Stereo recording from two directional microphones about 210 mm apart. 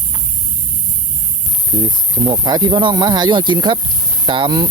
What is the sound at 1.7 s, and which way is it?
Speech, 20° right (ahead or behind).